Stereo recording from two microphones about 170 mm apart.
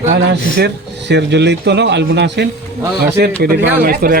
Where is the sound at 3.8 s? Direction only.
60° right (ahead or behind).